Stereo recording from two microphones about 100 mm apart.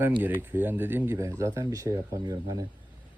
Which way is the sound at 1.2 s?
30° right (ahead or behind).